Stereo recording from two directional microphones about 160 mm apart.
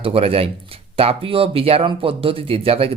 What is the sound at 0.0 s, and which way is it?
Speech, 35° right (ahead or behind).